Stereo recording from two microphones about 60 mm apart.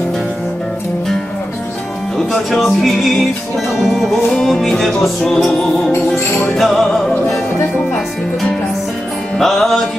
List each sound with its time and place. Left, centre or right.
2.1 s music: centre
5.9 s music: left
6.5 s music: centre
9.4 s music: centre